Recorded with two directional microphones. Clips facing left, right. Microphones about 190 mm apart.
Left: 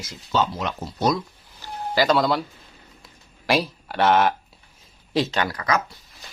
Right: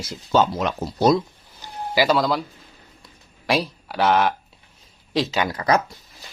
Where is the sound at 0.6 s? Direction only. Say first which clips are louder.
Right 4 dB; 50° right (ahead or behind).